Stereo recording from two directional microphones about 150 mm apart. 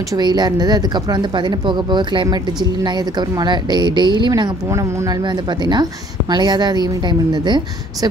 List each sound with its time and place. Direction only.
0.1 s a woman's voice: 30° right (ahead or behind)